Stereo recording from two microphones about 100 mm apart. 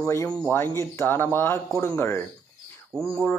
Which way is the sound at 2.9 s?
65° right (ahead or behind).